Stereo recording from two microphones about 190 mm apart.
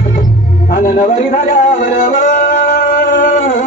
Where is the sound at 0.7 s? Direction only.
50° left (ahead or behind).